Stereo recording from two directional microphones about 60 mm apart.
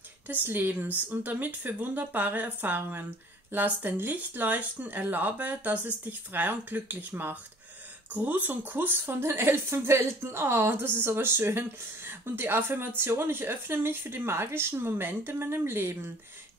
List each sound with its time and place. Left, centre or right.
0.3 s a woman's voice: right